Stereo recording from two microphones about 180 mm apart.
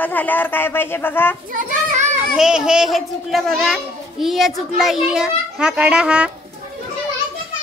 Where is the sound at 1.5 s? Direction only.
45° right (ahead or behind).